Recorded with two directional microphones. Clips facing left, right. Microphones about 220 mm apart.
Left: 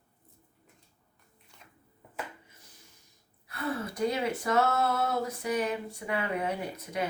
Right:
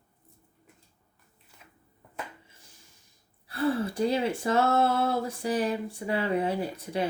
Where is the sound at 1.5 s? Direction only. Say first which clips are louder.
Right 1 dB; 5° right (ahead or behind).